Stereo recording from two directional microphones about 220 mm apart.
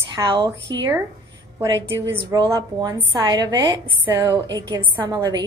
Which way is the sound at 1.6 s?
15° right (ahead or behind).